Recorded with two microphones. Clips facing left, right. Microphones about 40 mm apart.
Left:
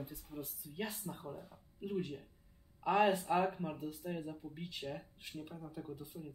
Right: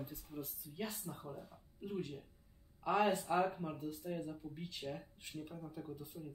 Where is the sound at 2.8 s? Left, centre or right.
Left.